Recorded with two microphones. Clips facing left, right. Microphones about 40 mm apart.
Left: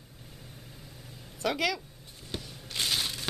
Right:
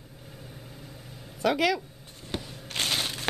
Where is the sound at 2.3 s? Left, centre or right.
Right.